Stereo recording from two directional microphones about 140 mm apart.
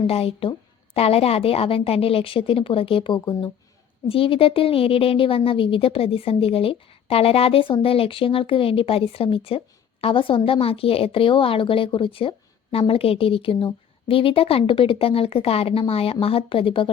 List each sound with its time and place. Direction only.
0.1 s a woman's voice: 45° left (ahead or behind)